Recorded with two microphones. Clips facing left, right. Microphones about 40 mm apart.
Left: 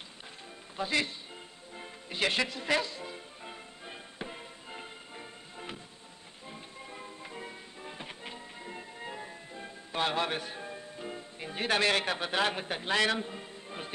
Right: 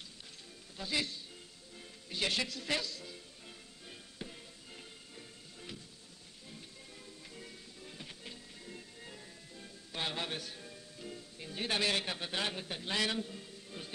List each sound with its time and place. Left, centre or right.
0.7 s speech: left
1.8 s music: left